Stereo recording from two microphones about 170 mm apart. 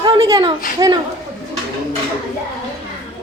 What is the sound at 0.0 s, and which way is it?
Speech, 20° right (ahead or behind).